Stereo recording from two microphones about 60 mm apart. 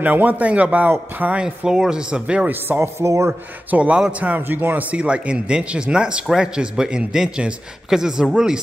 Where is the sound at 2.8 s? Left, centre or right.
Right.